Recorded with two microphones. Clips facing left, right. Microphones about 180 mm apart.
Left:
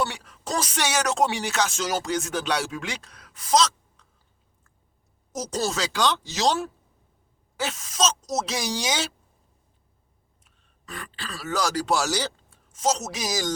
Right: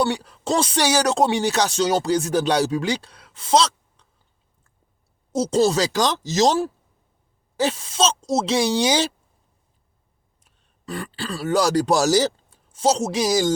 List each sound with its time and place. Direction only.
0.0 s speech: 35° right (ahead or behind)
5.3 s speech: 30° right (ahead or behind)
10.4 s speech: 30° right (ahead or behind)